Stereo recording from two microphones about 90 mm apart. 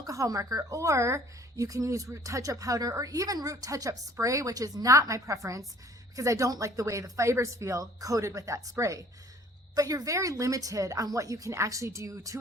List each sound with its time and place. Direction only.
0.0 s a woman's voice: 40° right (ahead or behind)